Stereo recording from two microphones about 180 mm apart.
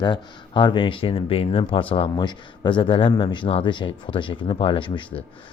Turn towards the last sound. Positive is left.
turn(degrees=25)  # may be behind; listen again after turning